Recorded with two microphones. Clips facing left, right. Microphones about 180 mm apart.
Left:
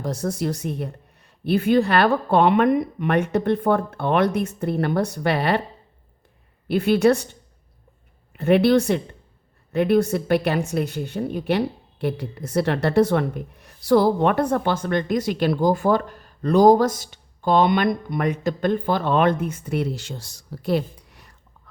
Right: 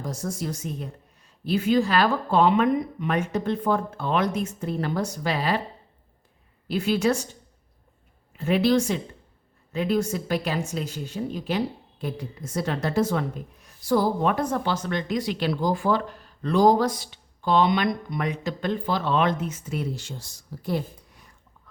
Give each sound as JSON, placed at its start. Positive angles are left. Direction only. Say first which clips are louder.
{"t": 0.0, "sound": "speech", "louder": "left 6 dB", "side_deg": 65}
{"t": 6.7, "sound": "speech", "louder": "left 6 dB", "side_deg": 60}
{"t": 8.3, "sound": "speech", "louder": "left 5 dB", "side_deg": 60}